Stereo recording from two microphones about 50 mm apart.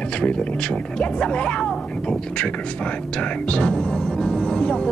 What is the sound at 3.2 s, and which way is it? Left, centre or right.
Music, left.